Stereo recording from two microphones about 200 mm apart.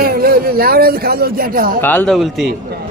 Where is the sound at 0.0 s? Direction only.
50° right (ahead or behind).